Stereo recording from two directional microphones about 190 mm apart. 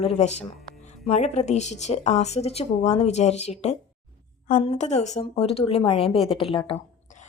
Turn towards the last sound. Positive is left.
turn(degrees=30)  # may be behind; listen again after turning